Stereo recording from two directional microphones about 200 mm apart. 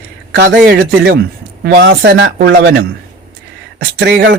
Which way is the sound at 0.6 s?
45° right (ahead or behind).